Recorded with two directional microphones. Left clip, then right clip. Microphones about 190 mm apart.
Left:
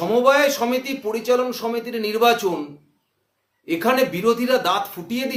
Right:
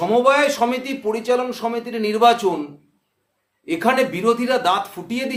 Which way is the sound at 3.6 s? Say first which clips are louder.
Right 1 dB; 20° right (ahead or behind).